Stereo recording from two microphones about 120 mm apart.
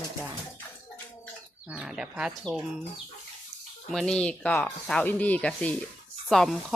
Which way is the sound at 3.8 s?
Centre (ahead or behind).